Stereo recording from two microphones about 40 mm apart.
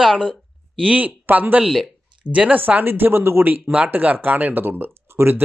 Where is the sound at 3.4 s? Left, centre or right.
Right.